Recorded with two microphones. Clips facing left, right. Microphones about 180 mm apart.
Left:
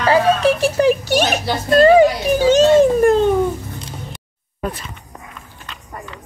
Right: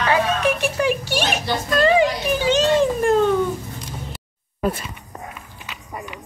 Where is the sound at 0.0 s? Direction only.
35° left (ahead or behind).